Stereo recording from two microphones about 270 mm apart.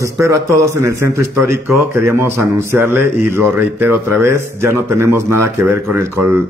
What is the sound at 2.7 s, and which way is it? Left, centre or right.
Speech, right.